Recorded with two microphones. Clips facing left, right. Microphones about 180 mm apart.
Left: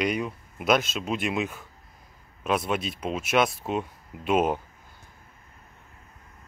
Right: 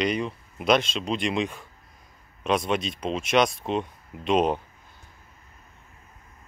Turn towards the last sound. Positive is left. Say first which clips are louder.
# right 1 dB
turn(degrees=5)  # may be behind; listen again after turning